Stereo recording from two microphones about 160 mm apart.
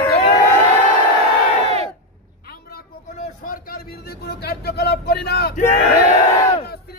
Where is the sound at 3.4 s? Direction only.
65° left (ahead or behind); by 5.5 s 90° left.